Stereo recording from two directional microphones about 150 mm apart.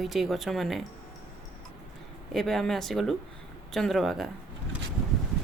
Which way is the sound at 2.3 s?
Centre (ahead or behind).